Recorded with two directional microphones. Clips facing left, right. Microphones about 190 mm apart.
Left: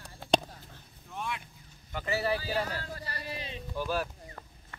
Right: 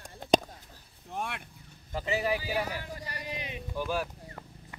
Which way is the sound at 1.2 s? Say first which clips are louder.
Right 1 dB; 55° right (ahead or behind).